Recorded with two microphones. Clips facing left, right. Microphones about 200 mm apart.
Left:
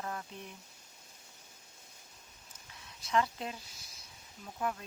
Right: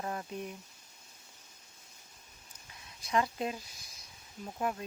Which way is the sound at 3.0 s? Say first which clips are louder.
Right 1 dB; 15° right (ahead or behind).